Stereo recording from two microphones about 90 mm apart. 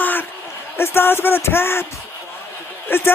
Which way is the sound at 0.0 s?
20° left (ahead or behind).